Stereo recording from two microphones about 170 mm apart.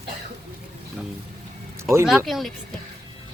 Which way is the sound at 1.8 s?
15° right (ahead or behind).